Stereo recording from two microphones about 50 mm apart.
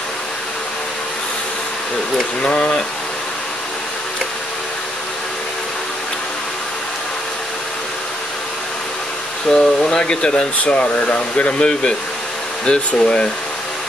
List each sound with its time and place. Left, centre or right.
2.4 s speech: centre
9.5 s air conditioning: centre
10.6 s speech: left